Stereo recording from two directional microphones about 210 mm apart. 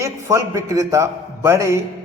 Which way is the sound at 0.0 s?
15° right (ahead or behind).